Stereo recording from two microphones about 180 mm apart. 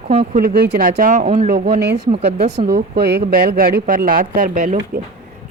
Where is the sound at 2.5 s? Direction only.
65° right (ahead or behind).